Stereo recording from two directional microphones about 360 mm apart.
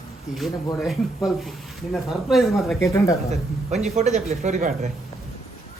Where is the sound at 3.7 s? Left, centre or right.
Centre.